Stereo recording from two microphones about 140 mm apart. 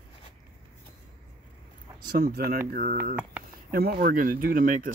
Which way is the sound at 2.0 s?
90° right.